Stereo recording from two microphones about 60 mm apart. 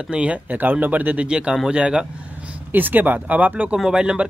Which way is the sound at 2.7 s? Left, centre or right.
Right.